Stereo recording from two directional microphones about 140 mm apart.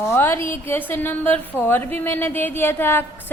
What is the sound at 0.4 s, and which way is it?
A woman's voice, 15° left (ahead or behind).